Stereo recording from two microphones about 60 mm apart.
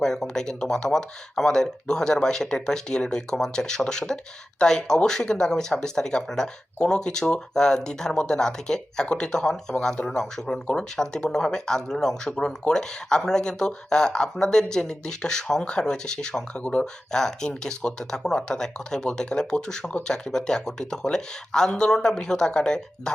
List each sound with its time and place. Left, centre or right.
0.0 s speech: centre
20.1 s speech: centre